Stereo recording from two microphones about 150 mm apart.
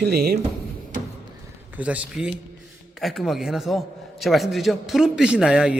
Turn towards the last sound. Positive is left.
turn(degrees=-5)  # may be behind; listen again after turning